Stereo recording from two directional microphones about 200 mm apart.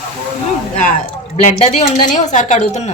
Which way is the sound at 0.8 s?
40° left (ahead or behind).